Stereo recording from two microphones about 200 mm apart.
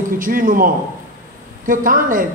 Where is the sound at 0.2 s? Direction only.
45° right (ahead or behind).